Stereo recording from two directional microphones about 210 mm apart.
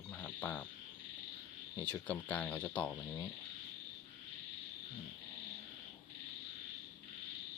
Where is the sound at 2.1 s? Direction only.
5° left (ahead or behind).